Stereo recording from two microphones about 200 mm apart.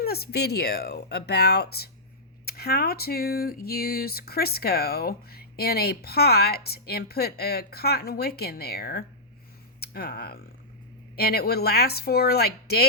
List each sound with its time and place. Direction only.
0.0 s speech: 50° left (ahead or behind)